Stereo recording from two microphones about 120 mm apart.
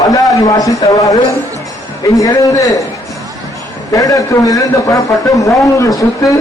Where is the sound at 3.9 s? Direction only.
30° left (ahead or behind).